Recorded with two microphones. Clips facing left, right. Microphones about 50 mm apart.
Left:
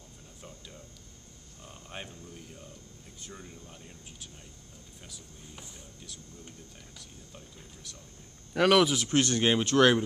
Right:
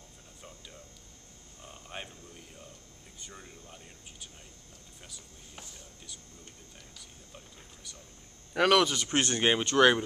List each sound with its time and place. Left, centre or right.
1.6 s a sound: centre
3.2 s speech: centre
7.0 s a sound: centre
8.5 s speech: centre
9.1 s speech: right
9.4 s speech: centre